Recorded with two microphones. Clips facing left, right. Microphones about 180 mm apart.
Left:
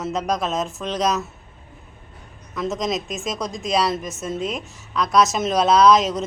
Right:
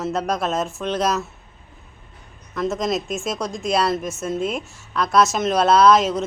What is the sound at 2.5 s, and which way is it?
Speech, centre (ahead or behind).